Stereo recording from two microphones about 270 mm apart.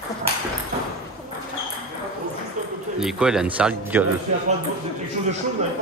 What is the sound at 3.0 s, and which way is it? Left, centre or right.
Speech, centre.